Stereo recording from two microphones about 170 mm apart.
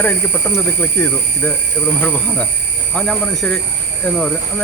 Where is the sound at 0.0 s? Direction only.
10° left (ahead or behind).